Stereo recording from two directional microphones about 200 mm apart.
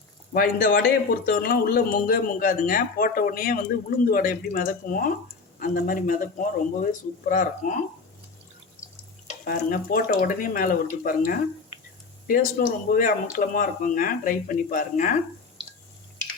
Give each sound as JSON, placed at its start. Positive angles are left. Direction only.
{"t": 0.3, "sound": "a man's voice", "side_deg": 45}
{"t": 9.5, "sound": "a man's voice", "side_deg": 45}
{"t": 12.3, "sound": "a man's voice", "side_deg": 45}